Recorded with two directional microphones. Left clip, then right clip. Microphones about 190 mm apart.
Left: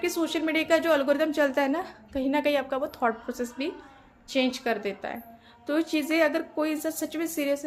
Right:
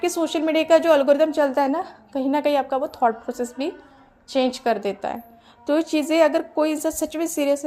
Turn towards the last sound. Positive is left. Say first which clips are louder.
# right 6 dB
turn(degrees=-30)  # may be behind; listen again after turning